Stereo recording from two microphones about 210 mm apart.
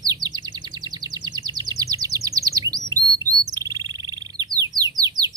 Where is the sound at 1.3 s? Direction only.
20° right (ahead or behind).